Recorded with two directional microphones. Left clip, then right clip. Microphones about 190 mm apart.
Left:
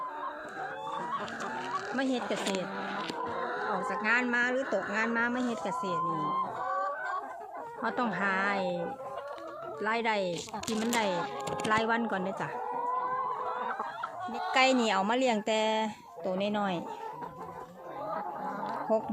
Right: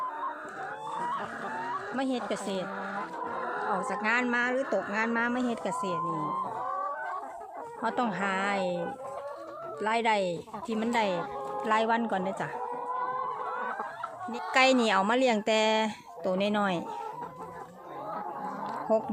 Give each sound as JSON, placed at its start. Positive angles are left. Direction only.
{"t": 2.0, "sound": "speech", "side_deg": 0}
{"t": 3.3, "sound": "a sound", "side_deg": 40}
{"t": 3.7, "sound": "speech", "side_deg": -20}
{"t": 7.8, "sound": "speech", "side_deg": -10}
{"t": 14.5, "sound": "speech", "side_deg": -15}
{"t": 18.9, "sound": "speech", "side_deg": -10}